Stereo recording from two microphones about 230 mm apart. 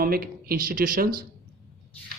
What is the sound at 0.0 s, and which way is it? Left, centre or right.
Speech, right.